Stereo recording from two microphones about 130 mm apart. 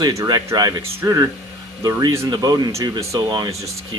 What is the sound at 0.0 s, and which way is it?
Speech, 30° right (ahead or behind).